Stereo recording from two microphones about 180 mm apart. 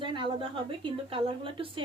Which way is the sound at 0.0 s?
25° right (ahead or behind).